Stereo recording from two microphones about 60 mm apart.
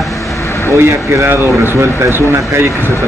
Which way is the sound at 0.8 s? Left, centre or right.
Right.